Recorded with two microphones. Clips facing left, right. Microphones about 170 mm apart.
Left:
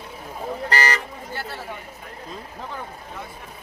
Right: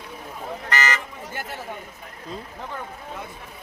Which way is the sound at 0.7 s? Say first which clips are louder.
Left 1 dB; 35° left (ahead or behind).